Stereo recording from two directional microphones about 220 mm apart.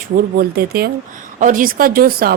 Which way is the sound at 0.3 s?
45° right (ahead or behind).